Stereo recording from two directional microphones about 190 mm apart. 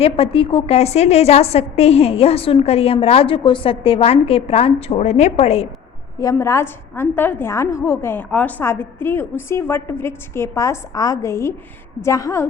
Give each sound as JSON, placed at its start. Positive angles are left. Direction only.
{"t": 0.0, "sound": "a woman's voice", "side_deg": 30}
{"t": 6.1, "sound": "a woman's voice", "side_deg": 15}